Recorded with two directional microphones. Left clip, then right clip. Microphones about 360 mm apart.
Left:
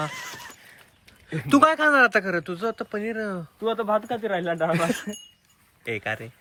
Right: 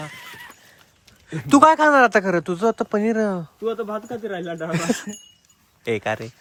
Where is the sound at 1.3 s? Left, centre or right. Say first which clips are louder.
Right 5 dB; centre.